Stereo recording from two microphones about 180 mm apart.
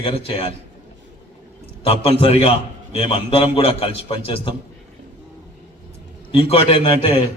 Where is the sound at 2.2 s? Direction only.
35° left (ahead or behind).